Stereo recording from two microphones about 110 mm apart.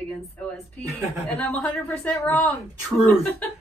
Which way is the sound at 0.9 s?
15° left (ahead or behind).